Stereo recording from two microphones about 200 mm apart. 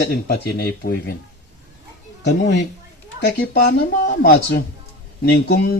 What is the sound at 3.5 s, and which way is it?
Speech, 50° left (ahead or behind).